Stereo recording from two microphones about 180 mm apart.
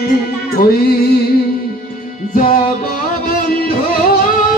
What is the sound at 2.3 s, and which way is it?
Music, 50° left (ahead or behind).